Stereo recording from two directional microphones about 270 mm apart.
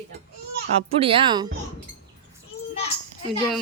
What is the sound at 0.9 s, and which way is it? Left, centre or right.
Speech, right.